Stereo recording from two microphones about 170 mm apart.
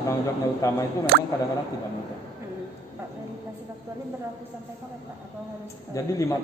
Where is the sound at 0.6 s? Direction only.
20° left (ahead or behind).